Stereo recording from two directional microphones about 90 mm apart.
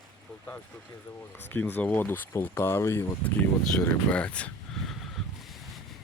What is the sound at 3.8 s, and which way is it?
Speech, 15° left (ahead or behind).